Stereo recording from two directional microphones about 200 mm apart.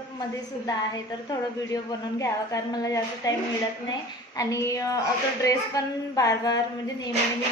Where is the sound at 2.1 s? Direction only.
15° left (ahead or behind).